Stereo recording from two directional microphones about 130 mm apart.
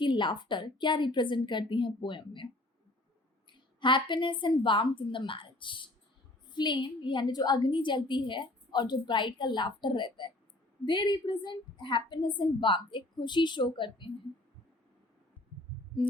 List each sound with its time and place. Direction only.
0.0 s a woman's voice: 40° left (ahead or behind)
3.8 s a woman's voice: 40° left (ahead or behind)